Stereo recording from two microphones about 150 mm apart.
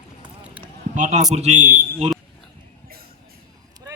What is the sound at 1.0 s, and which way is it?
A man's voice, 55° right (ahead or behind).